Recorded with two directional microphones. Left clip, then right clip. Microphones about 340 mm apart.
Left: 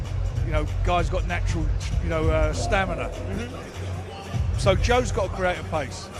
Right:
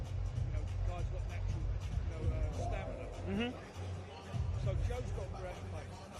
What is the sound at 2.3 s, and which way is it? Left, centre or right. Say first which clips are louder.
Speech: left 19 dB; left.